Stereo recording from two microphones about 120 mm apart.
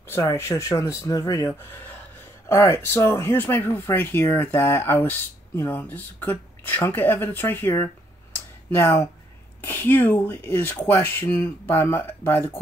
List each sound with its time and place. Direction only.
0.1 s speech: 25° left (ahead or behind)